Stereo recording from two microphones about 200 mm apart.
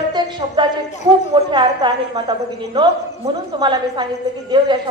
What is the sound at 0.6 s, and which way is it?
A woman's voice, 20° right (ahead or behind).